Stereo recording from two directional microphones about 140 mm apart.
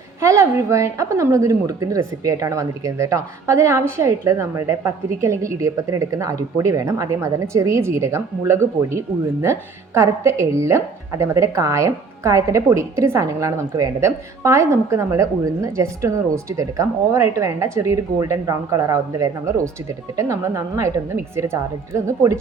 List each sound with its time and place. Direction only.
0.2 s a woman's voice: 20° right (ahead or behind)